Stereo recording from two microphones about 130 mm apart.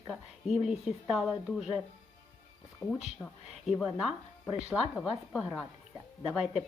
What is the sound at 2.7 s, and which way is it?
Speech, 5° left (ahead or behind).